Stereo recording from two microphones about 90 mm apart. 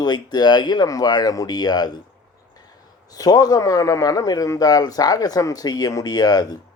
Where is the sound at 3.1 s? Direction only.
45° left (ahead or behind).